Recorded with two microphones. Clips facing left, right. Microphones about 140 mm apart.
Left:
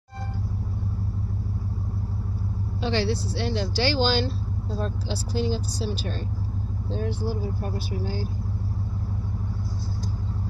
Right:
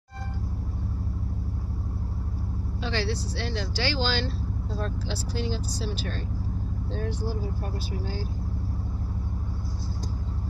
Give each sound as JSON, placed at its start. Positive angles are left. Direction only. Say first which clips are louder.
{"t": 2.8, "sound": "speech", "louder": "left 5 dB", "side_deg": 20}